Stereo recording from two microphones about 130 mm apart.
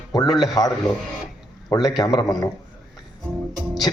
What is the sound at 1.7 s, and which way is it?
Speech, 30° left (ahead or behind).